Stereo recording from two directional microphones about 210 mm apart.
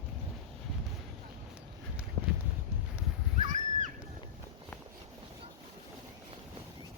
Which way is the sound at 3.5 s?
35° right (ahead or behind).